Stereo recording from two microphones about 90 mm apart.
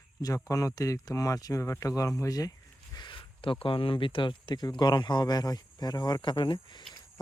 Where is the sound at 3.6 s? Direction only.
80° left; by 6.4 s 55° left (ahead or behind).